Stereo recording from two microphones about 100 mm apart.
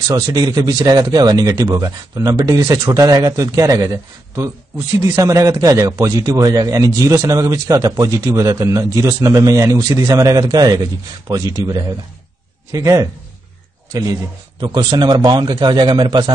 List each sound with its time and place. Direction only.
0.1 s a man's voice: 40° right (ahead or behind)
14.6 s a man's voice: 45° right (ahead or behind)